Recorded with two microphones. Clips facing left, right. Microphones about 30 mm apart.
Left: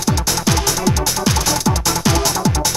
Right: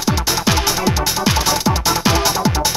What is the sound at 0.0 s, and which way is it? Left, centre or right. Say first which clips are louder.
Music: right 1 dB; centre.